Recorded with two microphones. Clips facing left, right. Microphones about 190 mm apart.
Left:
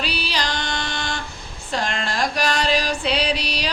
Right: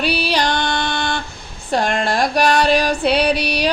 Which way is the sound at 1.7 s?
55° right (ahead or behind).